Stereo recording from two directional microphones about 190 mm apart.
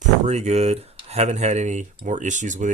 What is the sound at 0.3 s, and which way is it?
Speech, 35° right (ahead or behind).